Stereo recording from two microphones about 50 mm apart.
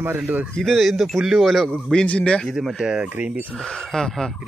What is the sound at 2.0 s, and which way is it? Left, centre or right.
Speech, left.